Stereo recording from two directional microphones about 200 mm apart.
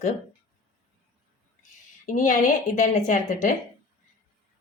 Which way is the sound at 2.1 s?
40° left (ahead or behind).